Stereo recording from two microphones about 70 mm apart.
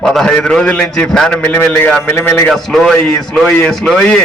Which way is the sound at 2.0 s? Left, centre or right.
Left.